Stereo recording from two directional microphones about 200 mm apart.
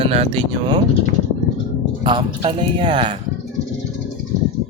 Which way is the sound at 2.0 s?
25° right (ahead or behind).